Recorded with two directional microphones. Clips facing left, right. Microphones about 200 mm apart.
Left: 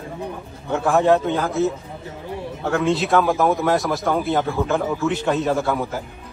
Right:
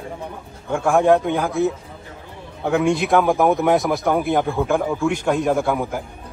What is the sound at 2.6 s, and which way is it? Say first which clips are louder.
A man's voice: right 2 dB; 15° right (ahead or behind).